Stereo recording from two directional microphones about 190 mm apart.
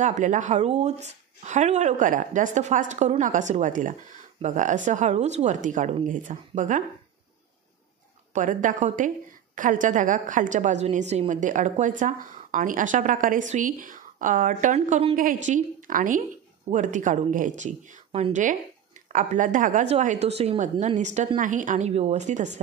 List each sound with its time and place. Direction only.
0.0 s a woman's voice: 40° right (ahead or behind)
8.3 s a woman's voice: 40° right (ahead or behind)